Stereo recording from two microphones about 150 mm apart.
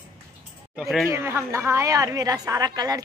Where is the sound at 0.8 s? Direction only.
Centre (ahead or behind).